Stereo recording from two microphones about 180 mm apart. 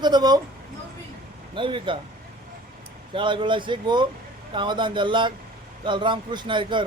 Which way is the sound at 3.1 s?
25° right (ahead or behind).